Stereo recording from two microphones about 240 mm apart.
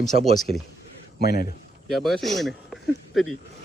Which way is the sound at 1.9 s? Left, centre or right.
Centre.